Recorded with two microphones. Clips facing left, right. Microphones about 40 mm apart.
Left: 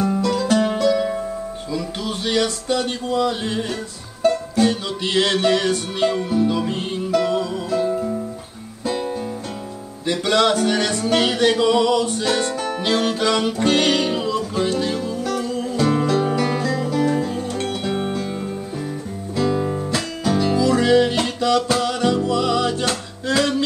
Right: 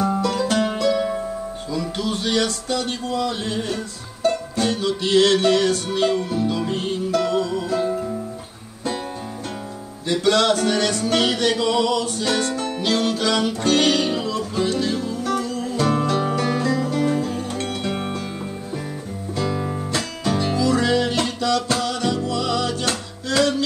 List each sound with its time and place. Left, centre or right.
0.2 s music: centre
4.2 s music: centre
4.6 s music: centre
10.0 s music: centre
12.8 s music: left
15.4 s music: left
15.7 s music: centre
19.3 s music: centre
20.5 s music: centre